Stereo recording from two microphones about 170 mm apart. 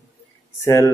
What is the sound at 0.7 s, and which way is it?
Speech, 20° left (ahead or behind).